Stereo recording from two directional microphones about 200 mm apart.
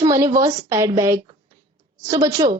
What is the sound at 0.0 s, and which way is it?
A woman's voice, 20° right (ahead or behind).